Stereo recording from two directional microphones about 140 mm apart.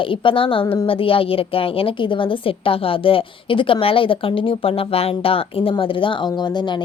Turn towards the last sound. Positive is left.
turn(degrees=30)  # may be behind; listen again after turning